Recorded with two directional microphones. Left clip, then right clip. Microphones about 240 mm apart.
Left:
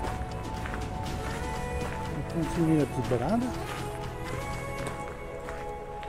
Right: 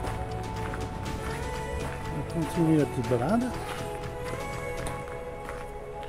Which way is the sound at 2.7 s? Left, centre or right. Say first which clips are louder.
Right 2 dB; centre.